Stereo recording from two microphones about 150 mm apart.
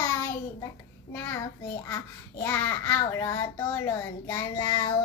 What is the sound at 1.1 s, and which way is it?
Speech, 10° left (ahead or behind).